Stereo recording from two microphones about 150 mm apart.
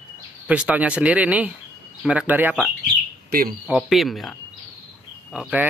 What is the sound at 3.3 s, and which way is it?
Speech, 75° right (ahead or behind).